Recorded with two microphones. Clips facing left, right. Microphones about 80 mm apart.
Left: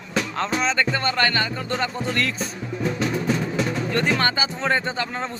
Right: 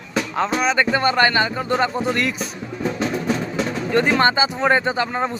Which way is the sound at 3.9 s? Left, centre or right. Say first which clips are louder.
Right 7 dB; right.